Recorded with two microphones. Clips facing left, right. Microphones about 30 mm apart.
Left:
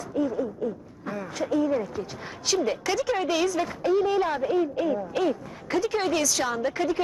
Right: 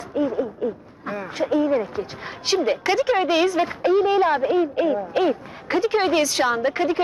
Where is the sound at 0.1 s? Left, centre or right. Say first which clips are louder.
Right 4 dB; right.